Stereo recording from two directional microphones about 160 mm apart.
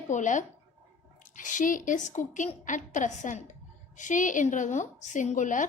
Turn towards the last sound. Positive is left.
turn(degrees=55)  # may be behind; listen again after turning